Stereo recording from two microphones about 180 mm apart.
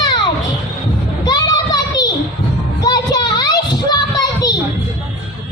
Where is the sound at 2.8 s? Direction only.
20° left (ahead or behind).